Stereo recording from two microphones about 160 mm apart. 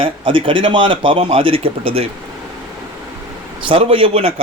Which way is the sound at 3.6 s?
35° right (ahead or behind).